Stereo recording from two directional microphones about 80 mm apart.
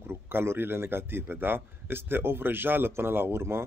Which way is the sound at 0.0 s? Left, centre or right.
Right.